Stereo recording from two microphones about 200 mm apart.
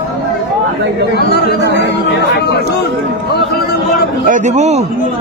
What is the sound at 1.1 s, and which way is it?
Speech, 55° left (ahead or behind).